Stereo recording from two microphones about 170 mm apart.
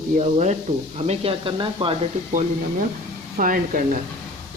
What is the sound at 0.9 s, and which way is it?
Speech, 35° right (ahead or behind).